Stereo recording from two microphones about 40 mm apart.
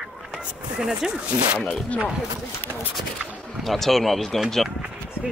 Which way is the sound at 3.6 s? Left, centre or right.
Centre.